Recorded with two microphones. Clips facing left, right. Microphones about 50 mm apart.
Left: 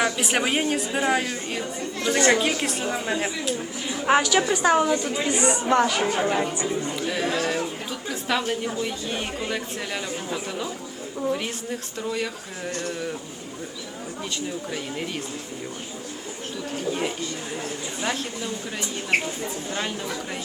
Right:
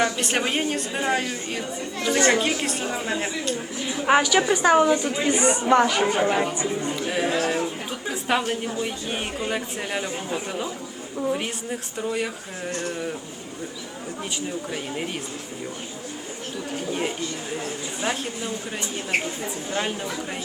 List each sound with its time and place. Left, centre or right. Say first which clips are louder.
0.0 s speech: even; centre
5.3 s speech: right 2 dB; right
5.5 s speech: right 2 dB; centre
7.9 s a sound: right 2 dB; right
8.8 s speech: even; centre
16.7 s a sound: even; centre
19.2 s speech: even; centre